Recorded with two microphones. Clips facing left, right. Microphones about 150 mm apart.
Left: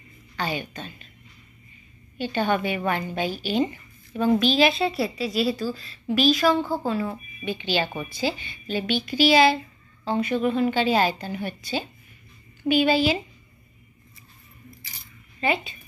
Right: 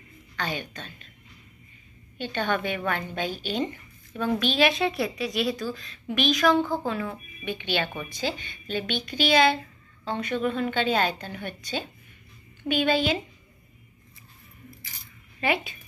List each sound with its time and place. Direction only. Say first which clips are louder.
0.4 s a woman's voice: left 3 dB; 10° left (ahead or behind)
2.1 s a woman's voice: left 4 dB; 10° left (ahead or behind)
7.4 s speech: left 3 dB; 60° right (ahead or behind)
7.8 s a woman's voice: left 3 dB; 5° left (ahead or behind)
15.4 s a woman's voice: left 1 dB; 5° right (ahead or behind)